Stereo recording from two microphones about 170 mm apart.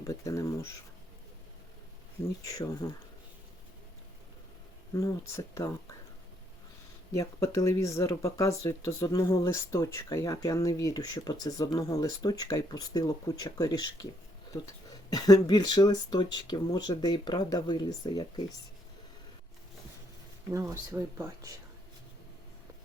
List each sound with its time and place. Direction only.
0.0 s speech: 20° left (ahead or behind)
2.4 s speech: 20° left (ahead or behind)
4.9 s speech: 15° left (ahead or behind)
7.1 s speech: 20° left (ahead or behind)
20.5 s speech: 15° right (ahead or behind)